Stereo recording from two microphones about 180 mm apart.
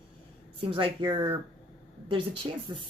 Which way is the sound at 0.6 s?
30° right (ahead or behind).